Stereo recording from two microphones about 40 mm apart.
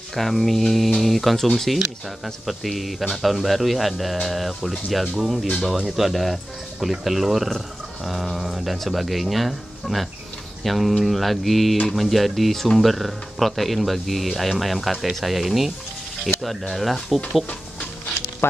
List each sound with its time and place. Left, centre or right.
0.1 s speech: centre
5.1 s speech: centre
18.4 s speech: left